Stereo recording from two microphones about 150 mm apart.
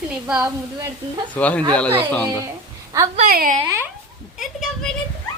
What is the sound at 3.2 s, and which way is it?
Speech, 70° right (ahead or behind).